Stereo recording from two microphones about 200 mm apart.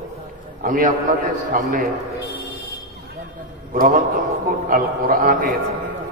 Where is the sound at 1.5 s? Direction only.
45° right (ahead or behind).